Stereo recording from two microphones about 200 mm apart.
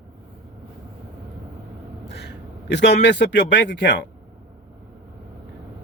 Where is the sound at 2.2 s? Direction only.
60° left (ahead or behind).